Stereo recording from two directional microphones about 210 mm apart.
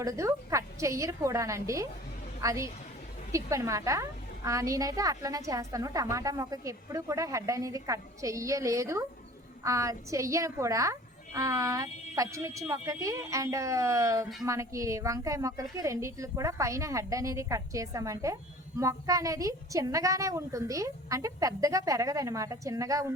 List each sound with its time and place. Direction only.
0.0 s a woman's voice: 15° right (ahead or behind)